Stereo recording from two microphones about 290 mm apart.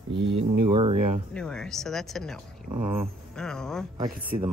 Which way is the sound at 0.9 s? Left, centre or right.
Right.